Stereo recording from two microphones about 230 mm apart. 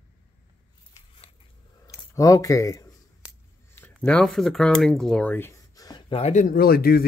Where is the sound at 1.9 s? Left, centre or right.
Centre.